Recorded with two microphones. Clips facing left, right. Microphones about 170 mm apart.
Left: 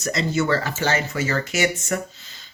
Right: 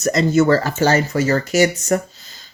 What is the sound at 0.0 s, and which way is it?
Speech, 45° right (ahead or behind).